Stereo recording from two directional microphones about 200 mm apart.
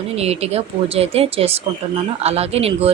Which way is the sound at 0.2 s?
30° right (ahead or behind).